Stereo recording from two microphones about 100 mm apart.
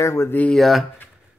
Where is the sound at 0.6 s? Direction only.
Centre (ahead or behind).